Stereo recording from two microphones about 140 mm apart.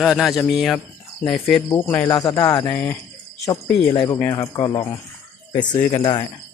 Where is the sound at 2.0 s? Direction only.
30° left (ahead or behind).